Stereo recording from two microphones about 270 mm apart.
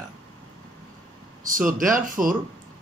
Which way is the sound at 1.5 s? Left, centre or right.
Right.